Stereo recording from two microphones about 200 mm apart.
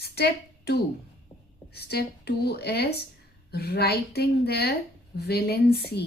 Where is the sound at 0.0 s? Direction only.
55° left (ahead or behind).